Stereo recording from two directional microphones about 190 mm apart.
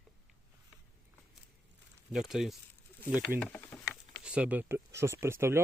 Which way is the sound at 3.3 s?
10° left (ahead or behind).